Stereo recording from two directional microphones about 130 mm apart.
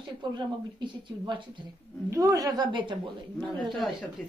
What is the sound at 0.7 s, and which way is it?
A woman's voice, 35° right (ahead or behind).